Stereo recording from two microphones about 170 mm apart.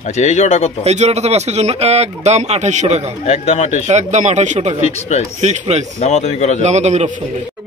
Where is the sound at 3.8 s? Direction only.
45° right (ahead or behind).